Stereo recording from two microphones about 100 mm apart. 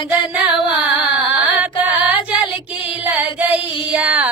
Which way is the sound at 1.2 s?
15° right (ahead or behind).